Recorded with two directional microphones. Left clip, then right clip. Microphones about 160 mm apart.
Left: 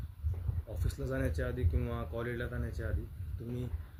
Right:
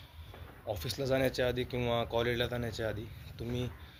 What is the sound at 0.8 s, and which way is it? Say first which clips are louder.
Speech: right 6 dB; 20° left (ahead or behind).